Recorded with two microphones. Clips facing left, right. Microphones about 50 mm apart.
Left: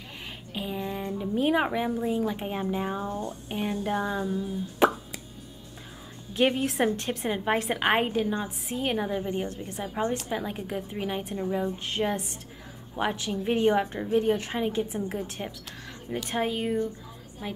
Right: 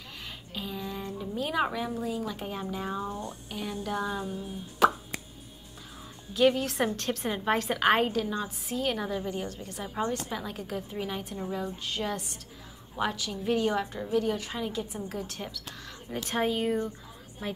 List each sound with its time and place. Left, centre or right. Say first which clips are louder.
0.6 s a woman's voice: left 4 dB; left
4.8 s plop: left 1 dB; left
6.3 s a woman's voice: even; left
16.3 s speech: right 1 dB; centre